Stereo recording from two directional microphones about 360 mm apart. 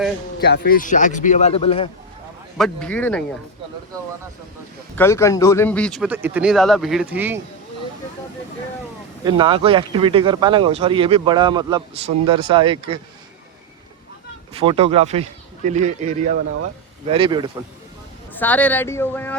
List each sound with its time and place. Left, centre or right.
0.3 s speech: left
2.6 s speech: centre
4.9 s speech: centre
9.2 s speech: centre
14.5 s speech: centre
18.3 s speech: centre